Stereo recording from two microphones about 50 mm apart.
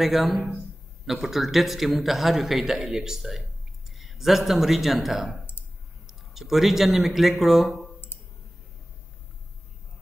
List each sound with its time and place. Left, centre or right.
0.0 s a man's voice: centre